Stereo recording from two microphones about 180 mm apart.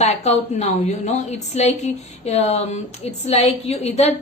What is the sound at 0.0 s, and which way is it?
A woman's voice, 40° left (ahead or behind).